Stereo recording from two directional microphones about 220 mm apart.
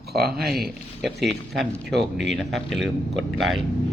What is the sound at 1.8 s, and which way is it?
Speech, 50° right (ahead or behind).